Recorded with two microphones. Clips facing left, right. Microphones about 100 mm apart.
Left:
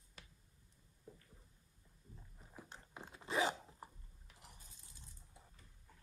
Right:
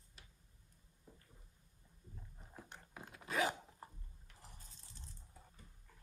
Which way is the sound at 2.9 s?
20° left (ahead or behind).